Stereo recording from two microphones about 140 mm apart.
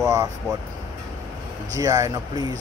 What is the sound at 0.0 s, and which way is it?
Speech, 25° right (ahead or behind).